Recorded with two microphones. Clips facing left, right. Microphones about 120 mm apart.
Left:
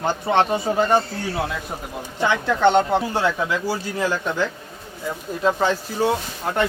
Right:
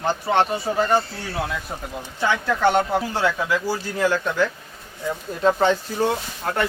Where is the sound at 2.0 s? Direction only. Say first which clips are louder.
Left 2 dB; 15° left (ahead or behind).